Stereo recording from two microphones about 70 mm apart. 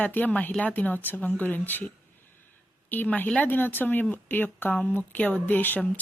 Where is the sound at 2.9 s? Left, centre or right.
Left.